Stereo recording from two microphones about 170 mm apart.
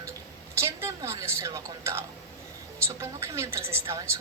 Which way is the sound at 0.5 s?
15° right (ahead or behind).